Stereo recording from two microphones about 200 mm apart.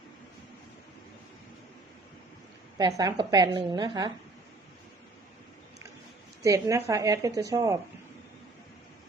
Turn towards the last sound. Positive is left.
turn(degrees=-15)  # may be behind; listen again after turning